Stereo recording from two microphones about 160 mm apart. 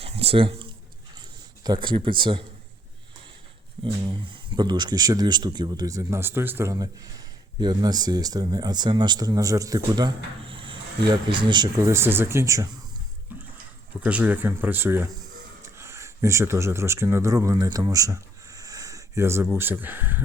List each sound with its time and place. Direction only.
0.0 s a sound: 35° right (ahead or behind)
1.6 s speech: 30° right (ahead or behind)
3.8 s speech: 30° right (ahead or behind)
14.0 s speech: 10° right (ahead or behind)